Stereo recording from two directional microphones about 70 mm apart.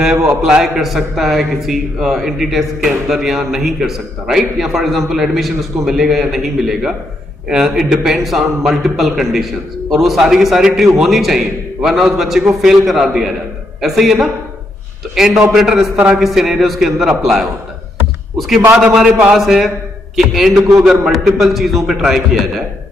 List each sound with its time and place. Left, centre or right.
0.0 s a man's voice: centre
18.9 s a man's voice: centre